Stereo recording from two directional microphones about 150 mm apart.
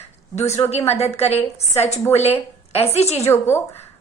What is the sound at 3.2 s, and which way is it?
Speech, 15° left (ahead or behind).